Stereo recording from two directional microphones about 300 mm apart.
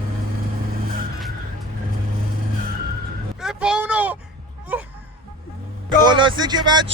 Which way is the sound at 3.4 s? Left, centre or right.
Centre.